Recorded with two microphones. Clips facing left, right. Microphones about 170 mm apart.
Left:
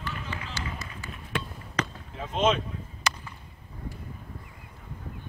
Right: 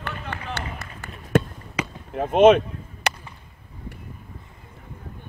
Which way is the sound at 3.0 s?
65° right (ahead or behind).